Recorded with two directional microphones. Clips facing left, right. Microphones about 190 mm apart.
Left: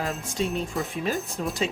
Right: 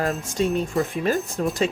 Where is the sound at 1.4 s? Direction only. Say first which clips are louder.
Right 5 dB; 50° right (ahead or behind).